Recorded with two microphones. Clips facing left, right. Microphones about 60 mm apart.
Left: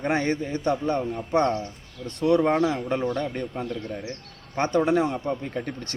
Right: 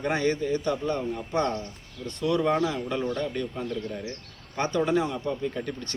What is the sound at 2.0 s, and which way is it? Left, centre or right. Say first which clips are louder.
Speech: left 5 dB; left.